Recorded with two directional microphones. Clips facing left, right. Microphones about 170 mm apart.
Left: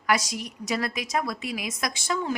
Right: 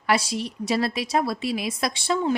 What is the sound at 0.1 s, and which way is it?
A woman's voice, 30° right (ahead or behind).